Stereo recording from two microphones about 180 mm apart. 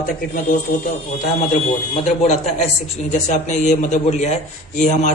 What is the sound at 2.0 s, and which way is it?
A man's voice, 40° left (ahead or behind).